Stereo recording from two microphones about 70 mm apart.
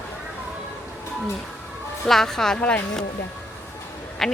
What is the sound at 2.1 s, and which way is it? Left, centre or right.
Speech, centre.